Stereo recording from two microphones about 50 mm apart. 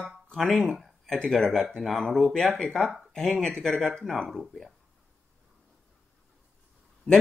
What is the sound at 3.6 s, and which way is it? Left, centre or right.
Speech, centre.